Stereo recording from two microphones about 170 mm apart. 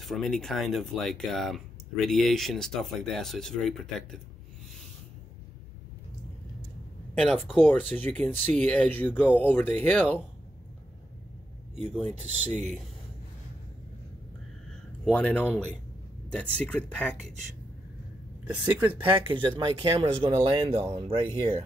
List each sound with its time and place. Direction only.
0.0 s speech: centre (ahead or behind)
7.2 s speech: 5° left (ahead or behind)
12.2 s speech: 40° right (ahead or behind)
15.0 s speech: 10° left (ahead or behind)
18.4 s speech: 10° right (ahead or behind)
18.9 s speech: 30° right (ahead or behind)